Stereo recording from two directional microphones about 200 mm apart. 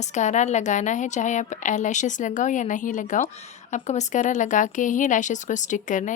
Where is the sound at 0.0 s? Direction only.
35° left (ahead or behind).